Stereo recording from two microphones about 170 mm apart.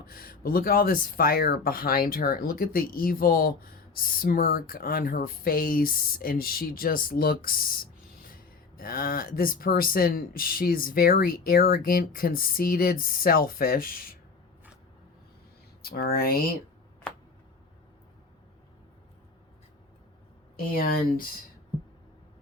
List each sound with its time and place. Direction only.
0.0 s speech: 60° left (ahead or behind)
15.8 s speech: 65° left (ahead or behind)
20.7 s speech: 60° left (ahead or behind)